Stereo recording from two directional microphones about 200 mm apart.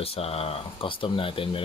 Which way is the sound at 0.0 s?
30° left (ahead or behind).